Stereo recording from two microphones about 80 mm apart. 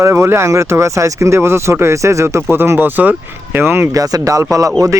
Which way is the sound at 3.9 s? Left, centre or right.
Right.